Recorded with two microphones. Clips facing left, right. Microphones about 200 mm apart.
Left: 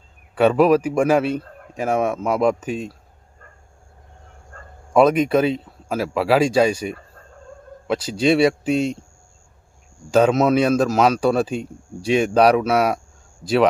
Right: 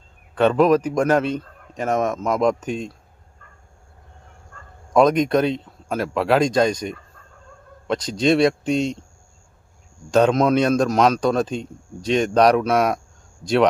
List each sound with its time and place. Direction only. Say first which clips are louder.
0.3 s speech: left 1 dB; 5° left (ahead or behind)
4.9 s speech: left 1 dB; 5° left (ahead or behind)
10.1 s speech: left 1 dB; 5° left (ahead or behind)